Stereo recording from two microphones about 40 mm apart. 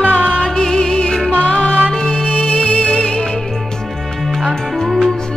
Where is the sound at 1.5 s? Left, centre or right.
Left.